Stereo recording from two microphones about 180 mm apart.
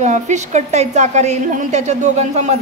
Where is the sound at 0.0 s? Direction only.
40° right (ahead or behind).